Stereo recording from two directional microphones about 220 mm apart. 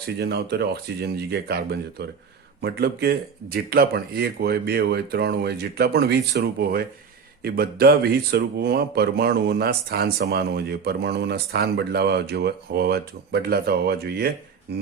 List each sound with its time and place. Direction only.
0.2 s speech: 45° right (ahead or behind)